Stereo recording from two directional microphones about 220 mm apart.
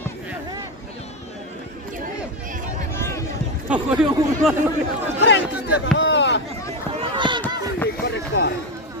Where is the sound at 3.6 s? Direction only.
5° right (ahead or behind).